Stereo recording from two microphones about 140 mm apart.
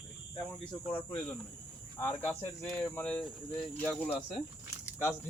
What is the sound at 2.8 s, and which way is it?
Speech, 10° left (ahead or behind).